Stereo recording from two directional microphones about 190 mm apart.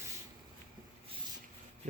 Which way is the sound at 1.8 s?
35° right (ahead or behind).